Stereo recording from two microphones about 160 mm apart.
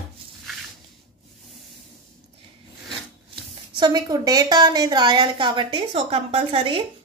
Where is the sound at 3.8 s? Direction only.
25° right (ahead or behind).